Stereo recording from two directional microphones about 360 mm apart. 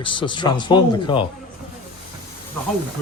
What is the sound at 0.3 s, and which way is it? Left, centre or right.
Speech, centre.